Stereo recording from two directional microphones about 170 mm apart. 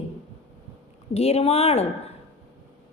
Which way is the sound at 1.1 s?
35° left (ahead or behind).